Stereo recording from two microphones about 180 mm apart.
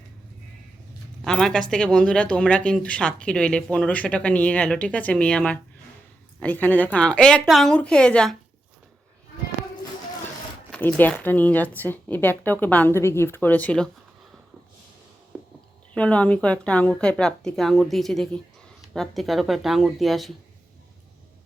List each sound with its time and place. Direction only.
1.2 s speech: centre (ahead or behind)
10.7 s speech: 10° left (ahead or behind)
15.3 s a sound: 5° right (ahead or behind)
16.0 s speech: 5° left (ahead or behind)